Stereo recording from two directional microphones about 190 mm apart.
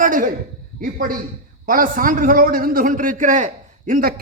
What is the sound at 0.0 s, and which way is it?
A man's voice, 45° right (ahead or behind).